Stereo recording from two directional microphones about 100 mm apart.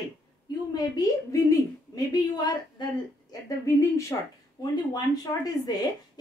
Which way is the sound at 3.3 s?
30° left (ahead or behind).